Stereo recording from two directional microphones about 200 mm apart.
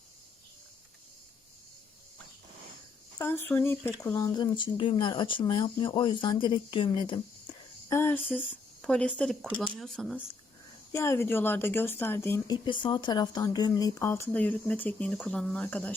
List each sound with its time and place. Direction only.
3.2 s speech: 10° left (ahead or behind)
10.9 s speech: 15° left (ahead or behind)
12.6 s speech: 25° left (ahead or behind)